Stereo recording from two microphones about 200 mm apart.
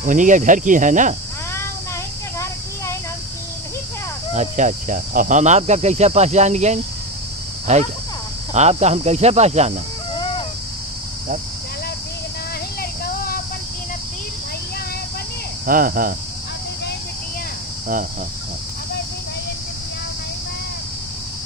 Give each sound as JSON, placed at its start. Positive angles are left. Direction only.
{"t": 0.0, "sound": "cricket", "side_deg": -40}
{"t": 4.3, "sound": "cricket", "side_deg": -35}
{"t": 13.0, "sound": "a sound", "side_deg": 50}
{"t": 15.6, "sound": "speech", "side_deg": -45}